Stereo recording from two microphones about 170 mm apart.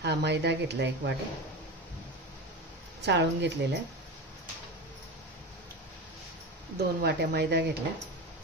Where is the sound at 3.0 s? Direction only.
90° right.